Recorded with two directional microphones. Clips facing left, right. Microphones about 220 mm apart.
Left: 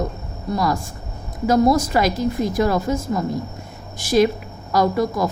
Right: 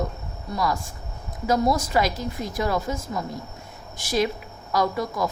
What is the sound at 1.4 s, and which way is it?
Speech, 45° left (ahead or behind).